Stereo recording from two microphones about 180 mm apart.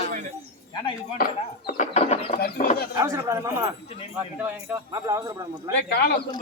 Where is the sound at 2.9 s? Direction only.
20° right (ahead or behind).